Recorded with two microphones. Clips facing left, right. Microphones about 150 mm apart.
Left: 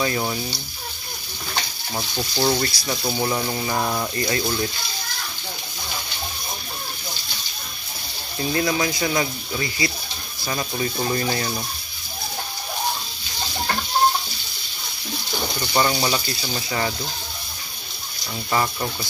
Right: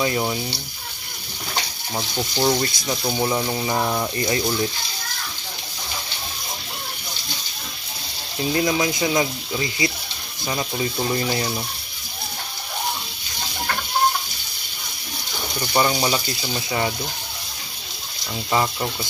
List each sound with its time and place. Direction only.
2.0 s speech: 15° right (ahead or behind)
4.2 s speech: 20° right (ahead or behind)
8.5 s speech: 20° right (ahead or behind)
15.6 s speech: 15° right (ahead or behind)
18.5 s speech: 15° right (ahead or behind)